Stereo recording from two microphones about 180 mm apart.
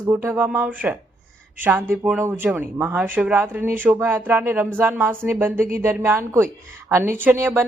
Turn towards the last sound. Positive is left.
turn(degrees=-10)  # may be behind; listen again after turning